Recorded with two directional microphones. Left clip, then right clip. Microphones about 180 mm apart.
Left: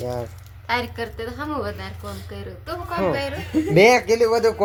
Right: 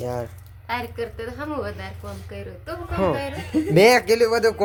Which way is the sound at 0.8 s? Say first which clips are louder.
Left 1 dB; 20° left (ahead or behind).